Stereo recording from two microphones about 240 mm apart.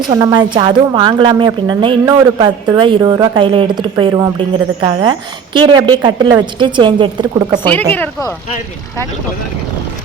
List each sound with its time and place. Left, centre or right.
0.1 s a woman's voice: centre
7.9 s speech: centre